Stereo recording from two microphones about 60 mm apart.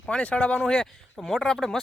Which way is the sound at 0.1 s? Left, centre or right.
Centre.